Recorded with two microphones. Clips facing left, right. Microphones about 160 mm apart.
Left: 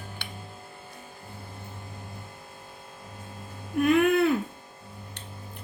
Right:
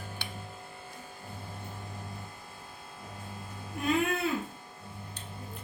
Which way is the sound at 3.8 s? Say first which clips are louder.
Left 8 dB; 65° left (ahead or behind).